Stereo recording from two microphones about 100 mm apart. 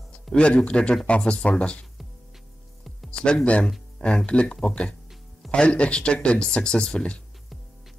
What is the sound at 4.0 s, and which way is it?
Speech, 10° left (ahead or behind).